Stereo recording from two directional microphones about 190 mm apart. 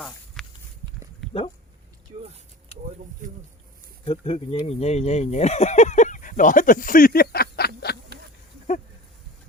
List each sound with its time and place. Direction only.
0.4 s walk: centre (ahead or behind)
3.2 s speech: 45° right (ahead or behind)
4.0 s speech: 30° left (ahead or behind); by 7.7 s 55° left (ahead or behind)